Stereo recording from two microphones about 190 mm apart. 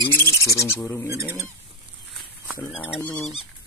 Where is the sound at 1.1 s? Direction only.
15° right (ahead or behind).